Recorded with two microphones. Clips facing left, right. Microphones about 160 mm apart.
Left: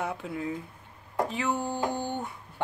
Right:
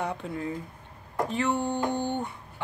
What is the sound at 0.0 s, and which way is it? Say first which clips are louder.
Speech: right 1 dB; 5° left (ahead or behind).